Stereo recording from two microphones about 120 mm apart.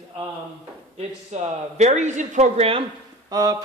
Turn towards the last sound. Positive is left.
turn(degrees=-30)  # may be behind; listen again after turning